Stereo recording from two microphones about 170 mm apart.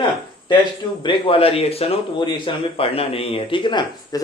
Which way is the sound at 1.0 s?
30° left (ahead or behind).